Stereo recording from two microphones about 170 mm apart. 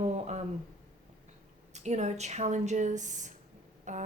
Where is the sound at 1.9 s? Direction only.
40° right (ahead or behind).